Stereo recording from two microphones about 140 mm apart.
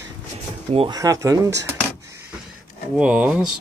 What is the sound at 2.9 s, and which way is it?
Speech, 10° right (ahead or behind).